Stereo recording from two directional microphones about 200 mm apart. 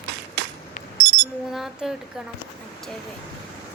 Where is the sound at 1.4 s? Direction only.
Centre (ahead or behind).